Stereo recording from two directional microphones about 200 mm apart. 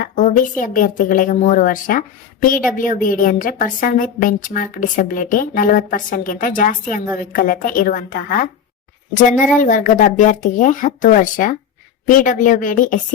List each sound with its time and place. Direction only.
0.0 s a woman's voice: 40° left (ahead or behind)
9.6 s a woman's voice: 40° left (ahead or behind)